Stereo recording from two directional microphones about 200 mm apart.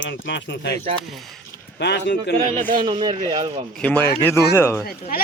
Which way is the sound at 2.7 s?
25° right (ahead or behind).